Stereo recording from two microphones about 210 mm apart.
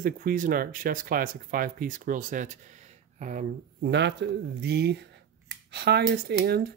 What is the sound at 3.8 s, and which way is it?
Speech, 55° right (ahead or behind).